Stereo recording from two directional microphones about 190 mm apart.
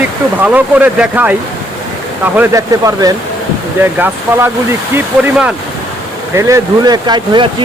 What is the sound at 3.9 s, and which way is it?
Speech, 10° right (ahead or behind).